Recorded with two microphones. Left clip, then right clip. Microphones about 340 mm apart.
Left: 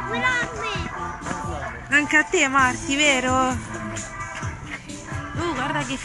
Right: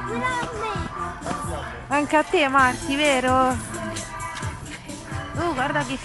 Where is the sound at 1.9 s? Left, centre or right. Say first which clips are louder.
Left 2 dB; centre.